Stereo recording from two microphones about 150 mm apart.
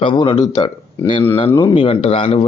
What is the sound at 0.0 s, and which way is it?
Speech, 35° left (ahead or behind).